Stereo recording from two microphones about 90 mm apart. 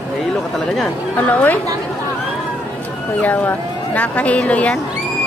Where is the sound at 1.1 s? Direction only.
15° left (ahead or behind).